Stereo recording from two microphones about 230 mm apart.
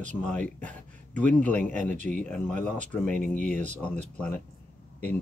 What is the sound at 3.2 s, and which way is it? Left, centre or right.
Speech, left.